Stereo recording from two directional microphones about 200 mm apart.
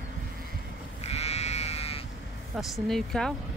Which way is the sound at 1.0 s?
30° left (ahead or behind).